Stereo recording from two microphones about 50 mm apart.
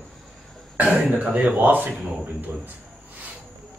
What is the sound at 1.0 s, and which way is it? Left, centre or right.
Speech, right.